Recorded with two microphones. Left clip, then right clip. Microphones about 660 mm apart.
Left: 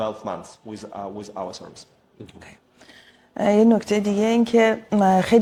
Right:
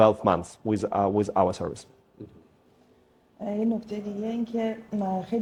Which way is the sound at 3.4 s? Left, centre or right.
Left.